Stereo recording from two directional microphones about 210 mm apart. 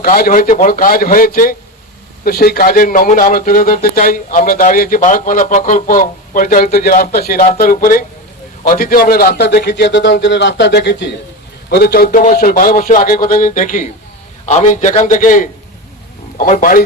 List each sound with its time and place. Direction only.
0.0 s a man's voice: 45° left (ahead or behind)